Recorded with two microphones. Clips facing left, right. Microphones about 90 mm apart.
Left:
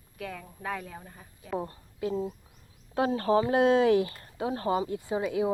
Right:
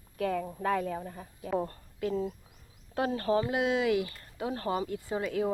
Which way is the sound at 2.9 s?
30° left (ahead or behind).